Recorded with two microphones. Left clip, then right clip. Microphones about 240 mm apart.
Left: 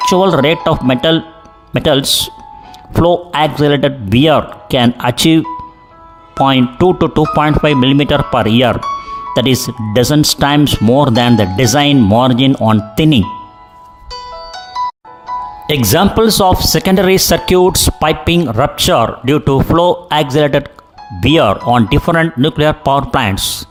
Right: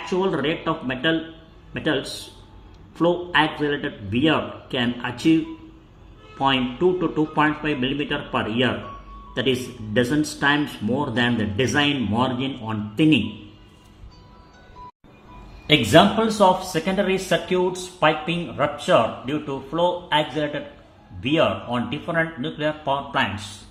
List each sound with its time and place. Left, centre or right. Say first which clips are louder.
0.0 s speech: left 13 dB; left
6.4 s speech: left 10 dB; left
15.6 s speech: left 2 dB; left